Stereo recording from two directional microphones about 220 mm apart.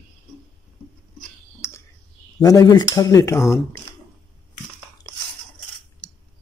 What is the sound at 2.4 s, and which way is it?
Speech, 15° left (ahead or behind).